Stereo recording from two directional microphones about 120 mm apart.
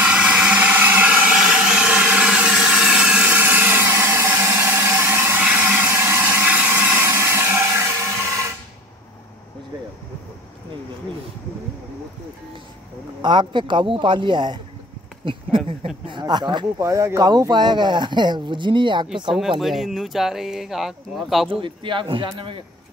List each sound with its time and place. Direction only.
0.0 s a sound: 10° right (ahead or behind)
13.2 s speech: 40° right (ahead or behind)
15.2 s a sound: 45° right (ahead or behind)
16.1 s speech: 40° right (ahead or behind)
16.8 s speech: 25° right (ahead or behind)
19.6 s speech: centre (ahead or behind)
21.5 s a man's voice: 45° right (ahead or behind)